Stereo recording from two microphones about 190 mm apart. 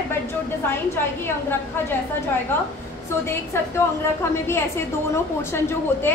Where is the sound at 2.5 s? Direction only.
10° left (ahead or behind).